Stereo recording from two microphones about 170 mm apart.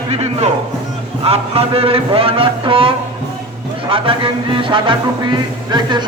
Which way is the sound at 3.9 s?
30° right (ahead or behind).